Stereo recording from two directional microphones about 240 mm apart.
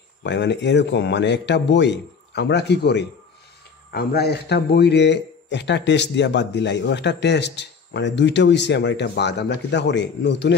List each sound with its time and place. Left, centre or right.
0.2 s speech: left